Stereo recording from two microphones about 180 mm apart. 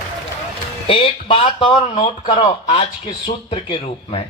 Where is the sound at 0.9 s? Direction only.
30° left (ahead or behind).